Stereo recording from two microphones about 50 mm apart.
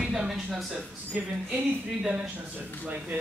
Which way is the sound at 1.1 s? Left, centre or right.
Right.